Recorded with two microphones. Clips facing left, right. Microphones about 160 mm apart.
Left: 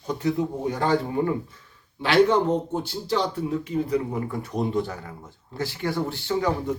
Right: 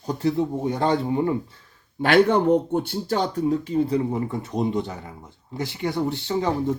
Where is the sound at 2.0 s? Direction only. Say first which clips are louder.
Right 2 dB; 55° right (ahead or behind); by 6.7 s 25° right (ahead or behind).